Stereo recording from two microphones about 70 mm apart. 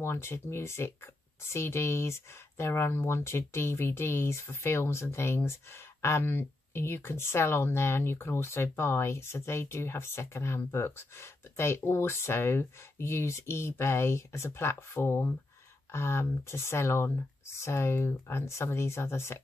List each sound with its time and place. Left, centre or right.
0.0 s speech: left